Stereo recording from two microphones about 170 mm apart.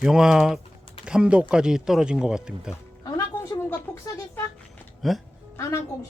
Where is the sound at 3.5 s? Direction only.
10° left (ahead or behind).